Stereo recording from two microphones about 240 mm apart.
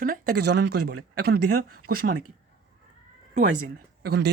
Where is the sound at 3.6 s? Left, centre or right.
Right.